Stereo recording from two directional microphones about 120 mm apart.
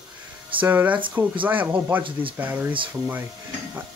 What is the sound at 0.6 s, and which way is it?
Speech, 15° right (ahead or behind).